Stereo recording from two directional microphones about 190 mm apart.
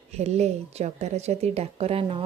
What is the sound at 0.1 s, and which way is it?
A woman's voice, 35° right (ahead or behind).